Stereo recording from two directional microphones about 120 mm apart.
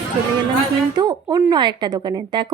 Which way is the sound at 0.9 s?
35° right (ahead or behind).